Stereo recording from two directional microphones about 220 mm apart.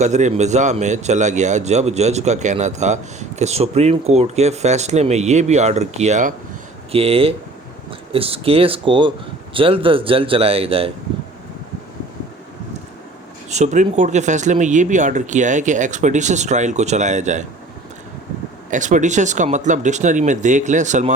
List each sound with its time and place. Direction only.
0.0 s speech: 30° right (ahead or behind)
13.5 s speech: 30° right (ahead or behind)
18.7 s speech: 35° right (ahead or behind)